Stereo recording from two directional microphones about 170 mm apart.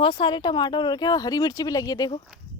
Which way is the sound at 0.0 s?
30° left (ahead or behind).